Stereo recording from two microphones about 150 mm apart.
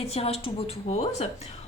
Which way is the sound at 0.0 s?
45° left (ahead or behind).